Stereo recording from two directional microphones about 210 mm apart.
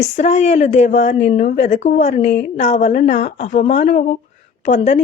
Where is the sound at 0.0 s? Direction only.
35° left (ahead or behind).